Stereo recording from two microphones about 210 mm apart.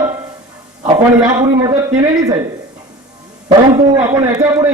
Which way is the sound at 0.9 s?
20° right (ahead or behind).